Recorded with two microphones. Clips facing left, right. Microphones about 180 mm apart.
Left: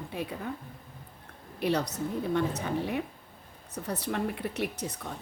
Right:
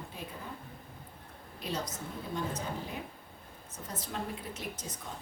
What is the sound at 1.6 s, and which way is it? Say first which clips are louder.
Speech: left 9 dB; 65° left (ahead or behind).